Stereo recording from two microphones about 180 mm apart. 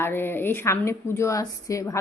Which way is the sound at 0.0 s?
10° left (ahead or behind).